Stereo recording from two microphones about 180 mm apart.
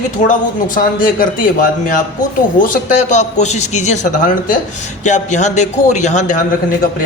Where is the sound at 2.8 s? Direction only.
40° left (ahead or behind).